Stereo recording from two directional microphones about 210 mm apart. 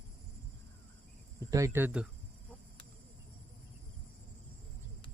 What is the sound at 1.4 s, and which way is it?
Speech, 15° right (ahead or behind).